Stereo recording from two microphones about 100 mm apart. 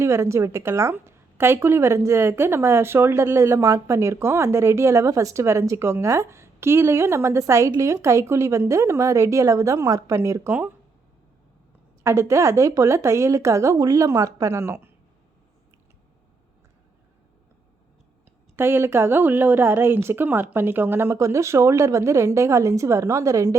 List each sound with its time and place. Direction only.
0.0 s a woman's voice: 25° right (ahead or behind)
10.5 s speech: 15° right (ahead or behind)
12.0 s a woman's voice: 30° right (ahead or behind)
18.5 s a woman's voice: 25° right (ahead or behind)